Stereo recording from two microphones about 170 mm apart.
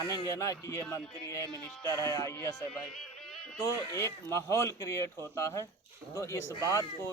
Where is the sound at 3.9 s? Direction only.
15° left (ahead or behind).